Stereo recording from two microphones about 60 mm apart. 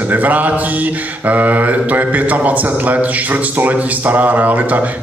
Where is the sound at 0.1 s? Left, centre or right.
Right.